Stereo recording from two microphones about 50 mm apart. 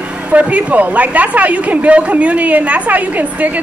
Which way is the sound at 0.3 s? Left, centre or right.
Right.